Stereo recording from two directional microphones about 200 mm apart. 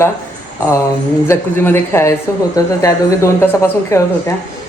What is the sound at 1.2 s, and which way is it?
A woman's voice, 10° left (ahead or behind).